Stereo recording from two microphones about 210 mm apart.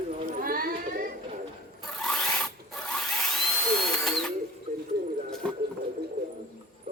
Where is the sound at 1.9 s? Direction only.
5° left (ahead or behind).